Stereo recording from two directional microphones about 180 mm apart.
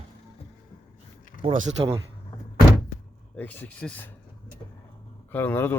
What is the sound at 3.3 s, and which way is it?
Speech, 10° left (ahead or behind).